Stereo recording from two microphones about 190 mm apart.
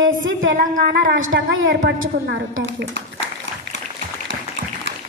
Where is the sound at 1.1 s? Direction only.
90° right.